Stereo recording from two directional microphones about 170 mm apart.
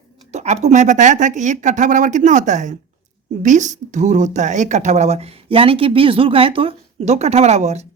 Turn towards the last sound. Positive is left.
turn(degrees=-40)  # may be behind; listen again after turning